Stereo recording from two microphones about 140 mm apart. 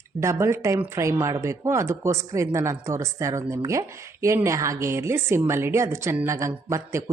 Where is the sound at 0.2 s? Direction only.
20° right (ahead or behind).